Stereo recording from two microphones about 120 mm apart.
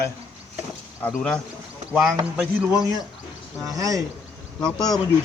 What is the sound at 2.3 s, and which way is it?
Speech, 10° right (ahead or behind).